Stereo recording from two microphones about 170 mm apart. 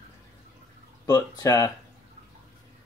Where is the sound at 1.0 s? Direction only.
20° left (ahead or behind).